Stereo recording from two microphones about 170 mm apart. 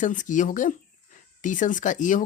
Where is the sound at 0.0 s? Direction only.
50° left (ahead or behind).